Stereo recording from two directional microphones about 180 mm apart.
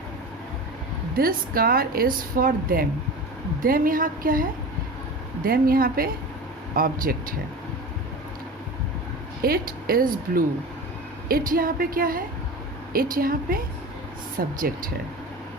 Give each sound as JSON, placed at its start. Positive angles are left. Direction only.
{"t": 1.1, "sound": "a woman's voice", "side_deg": -55}
{"t": 9.4, "sound": "a woman's voice", "side_deg": -55}